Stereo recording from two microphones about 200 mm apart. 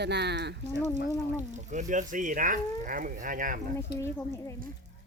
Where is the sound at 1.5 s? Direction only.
35° right (ahead or behind).